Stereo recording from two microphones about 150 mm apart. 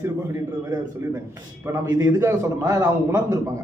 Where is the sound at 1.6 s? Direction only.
20° right (ahead or behind).